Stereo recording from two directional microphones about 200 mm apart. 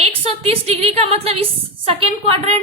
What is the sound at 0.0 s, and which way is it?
A woman's voice, 30° right (ahead or behind).